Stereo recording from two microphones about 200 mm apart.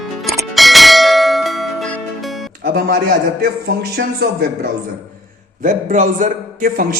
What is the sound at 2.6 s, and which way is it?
Music, 50° right (ahead or behind).